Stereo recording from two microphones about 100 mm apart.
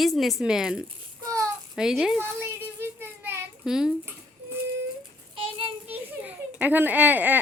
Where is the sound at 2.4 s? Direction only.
20° right (ahead or behind).